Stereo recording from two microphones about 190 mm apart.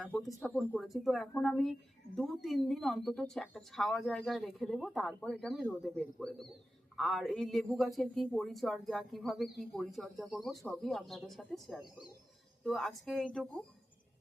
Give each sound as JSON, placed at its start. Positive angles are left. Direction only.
{"t": 0.0, "sound": "a man's voice", "side_deg": 0}